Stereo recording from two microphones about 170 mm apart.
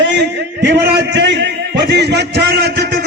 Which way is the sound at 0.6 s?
90° right.